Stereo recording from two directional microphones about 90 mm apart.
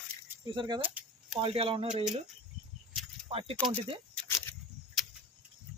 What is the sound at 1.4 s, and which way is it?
Speech, 90° right.